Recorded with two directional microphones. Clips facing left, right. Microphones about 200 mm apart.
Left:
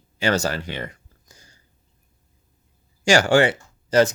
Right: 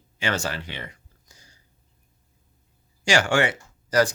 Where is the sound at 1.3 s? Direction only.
50° left (ahead or behind).